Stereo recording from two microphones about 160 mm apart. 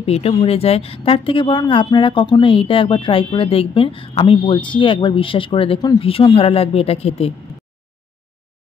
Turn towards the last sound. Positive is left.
turn(degrees=40)  # may be behind; listen again after turning